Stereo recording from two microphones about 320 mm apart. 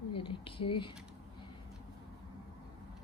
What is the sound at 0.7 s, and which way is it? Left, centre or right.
Speech, centre.